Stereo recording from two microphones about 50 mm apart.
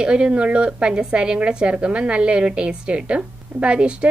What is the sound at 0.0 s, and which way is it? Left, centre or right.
A woman's voice, centre.